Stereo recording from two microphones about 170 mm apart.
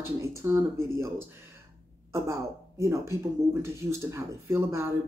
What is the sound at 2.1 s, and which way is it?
A woman's voice, 15° right (ahead or behind).